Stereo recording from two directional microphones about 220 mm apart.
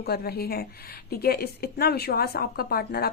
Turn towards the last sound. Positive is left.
turn(degrees=45)  # may be behind; listen again after turning